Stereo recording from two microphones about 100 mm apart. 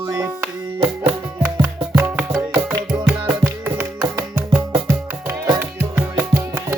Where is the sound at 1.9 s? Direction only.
20° right (ahead or behind).